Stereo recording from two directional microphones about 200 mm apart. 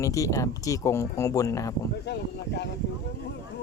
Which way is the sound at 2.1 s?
55° left (ahead or behind).